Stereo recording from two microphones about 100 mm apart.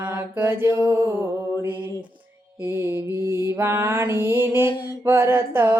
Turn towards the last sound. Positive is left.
turn(degrees=-25)  # may be behind; listen again after turning